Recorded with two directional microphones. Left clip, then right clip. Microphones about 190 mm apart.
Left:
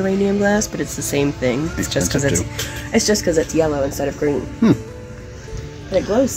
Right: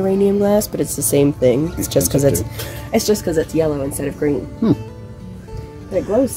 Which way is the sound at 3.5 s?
40° right (ahead or behind).